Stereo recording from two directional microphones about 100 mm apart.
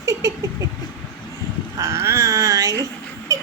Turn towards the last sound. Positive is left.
turn(degrees=-35)  # may be behind; listen again after turning